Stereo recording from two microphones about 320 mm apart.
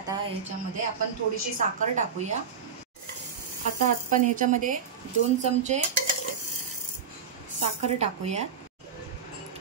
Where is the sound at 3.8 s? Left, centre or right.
Right.